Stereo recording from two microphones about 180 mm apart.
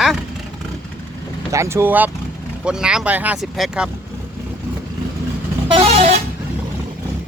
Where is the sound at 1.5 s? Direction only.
15° right (ahead or behind).